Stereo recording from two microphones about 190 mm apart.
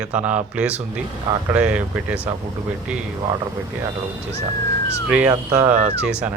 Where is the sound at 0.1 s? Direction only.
5° right (ahead or behind).